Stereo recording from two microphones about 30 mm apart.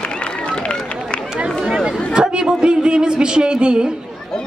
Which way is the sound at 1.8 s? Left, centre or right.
Right.